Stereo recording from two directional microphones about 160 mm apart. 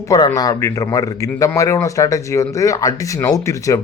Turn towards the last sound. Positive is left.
turn(degrees=20)  # may be behind; listen again after turning